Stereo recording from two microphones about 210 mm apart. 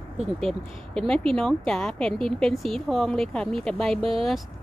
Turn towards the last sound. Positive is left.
turn(degrees=-25)  # may be behind; listen again after turning